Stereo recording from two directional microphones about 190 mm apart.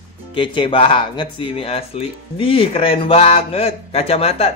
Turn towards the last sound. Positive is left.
turn(degrees=30)  # may be behind; listen again after turning